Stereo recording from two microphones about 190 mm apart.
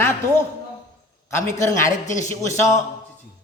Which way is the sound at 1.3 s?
15° left (ahead or behind).